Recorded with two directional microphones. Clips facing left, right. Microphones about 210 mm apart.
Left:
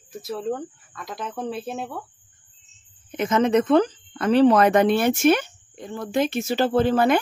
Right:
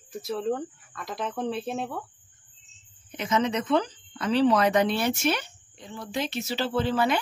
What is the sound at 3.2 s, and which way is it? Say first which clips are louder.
Speech: left 7 dB; 50° left (ahead or behind).